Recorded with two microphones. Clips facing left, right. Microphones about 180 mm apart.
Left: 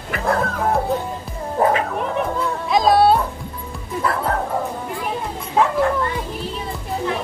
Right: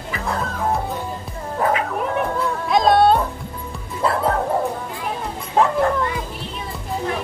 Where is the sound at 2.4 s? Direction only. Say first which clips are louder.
Right 1 dB; centre (ahead or behind).